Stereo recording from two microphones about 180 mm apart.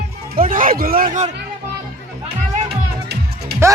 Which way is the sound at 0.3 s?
50° right (ahead or behind).